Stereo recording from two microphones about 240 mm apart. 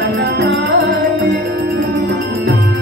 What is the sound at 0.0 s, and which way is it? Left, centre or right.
Music, right.